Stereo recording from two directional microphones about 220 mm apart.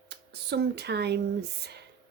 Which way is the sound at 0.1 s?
50° right (ahead or behind).